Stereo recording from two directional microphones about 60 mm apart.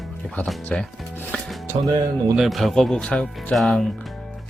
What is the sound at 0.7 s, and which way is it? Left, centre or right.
Speech, centre.